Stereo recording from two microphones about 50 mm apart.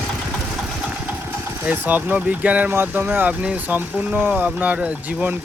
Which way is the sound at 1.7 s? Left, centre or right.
Right.